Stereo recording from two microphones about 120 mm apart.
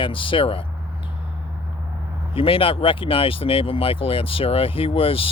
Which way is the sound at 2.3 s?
50° left (ahead or behind).